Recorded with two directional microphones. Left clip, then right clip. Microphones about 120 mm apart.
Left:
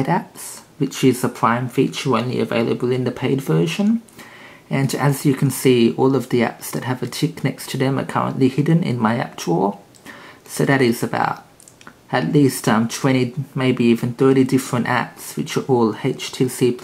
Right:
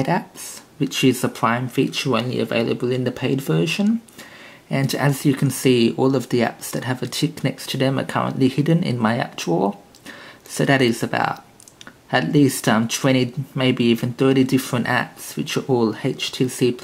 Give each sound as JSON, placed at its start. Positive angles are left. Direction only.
{"t": 0.7, "sound": "speech", "side_deg": -20}